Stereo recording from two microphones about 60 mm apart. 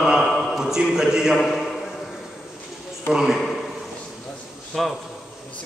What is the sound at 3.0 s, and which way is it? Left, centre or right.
Speech, centre.